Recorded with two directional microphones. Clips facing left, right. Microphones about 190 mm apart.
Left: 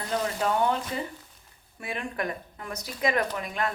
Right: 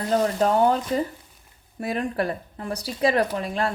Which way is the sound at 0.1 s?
40° right (ahead or behind).